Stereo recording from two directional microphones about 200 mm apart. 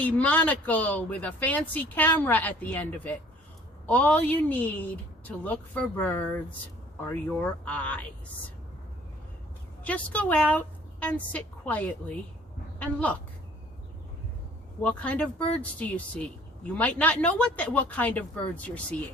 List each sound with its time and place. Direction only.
0.0 s speech: 5° left (ahead or behind)
9.8 s a woman's voice: 5° left (ahead or behind)
14.8 s speech: 5° left (ahead or behind)